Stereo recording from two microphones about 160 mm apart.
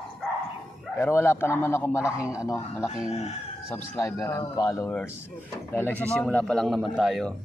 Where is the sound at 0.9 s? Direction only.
15° left (ahead or behind).